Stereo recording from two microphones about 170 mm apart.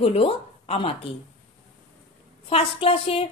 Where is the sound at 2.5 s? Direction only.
35° left (ahead or behind).